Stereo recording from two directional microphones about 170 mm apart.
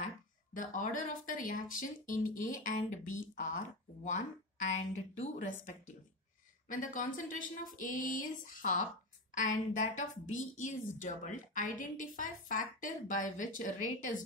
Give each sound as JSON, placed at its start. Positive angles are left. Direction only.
{"t": 0.6, "sound": "a woman's voice", "side_deg": 50}